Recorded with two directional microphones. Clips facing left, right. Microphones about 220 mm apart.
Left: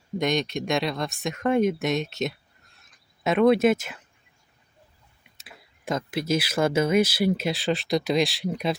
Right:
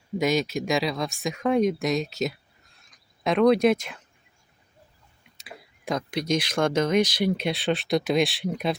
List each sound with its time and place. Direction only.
0.2 s speech: 5° right (ahead or behind)
2.7 s a sound: centre (ahead or behind)
5.4 s speech: centre (ahead or behind)